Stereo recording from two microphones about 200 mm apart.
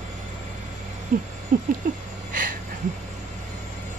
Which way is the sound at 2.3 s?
45° right (ahead or behind).